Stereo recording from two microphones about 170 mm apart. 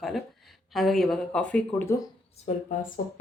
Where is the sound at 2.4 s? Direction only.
50° left (ahead or behind).